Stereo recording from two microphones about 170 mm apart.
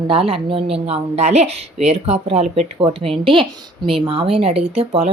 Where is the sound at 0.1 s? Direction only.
35° right (ahead or behind).